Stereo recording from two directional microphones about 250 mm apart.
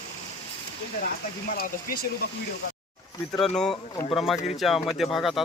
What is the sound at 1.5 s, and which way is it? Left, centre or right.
Speech, left.